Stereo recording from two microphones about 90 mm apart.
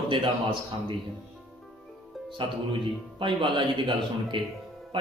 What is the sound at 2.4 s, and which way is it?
Speech, 70° right (ahead or behind).